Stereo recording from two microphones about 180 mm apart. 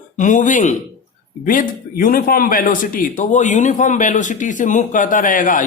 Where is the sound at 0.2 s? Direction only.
45° left (ahead or behind).